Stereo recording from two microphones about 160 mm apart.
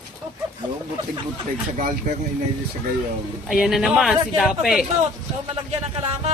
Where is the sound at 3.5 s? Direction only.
Centre (ahead or behind).